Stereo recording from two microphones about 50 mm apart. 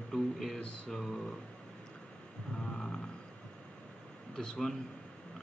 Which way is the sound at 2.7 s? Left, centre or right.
Centre.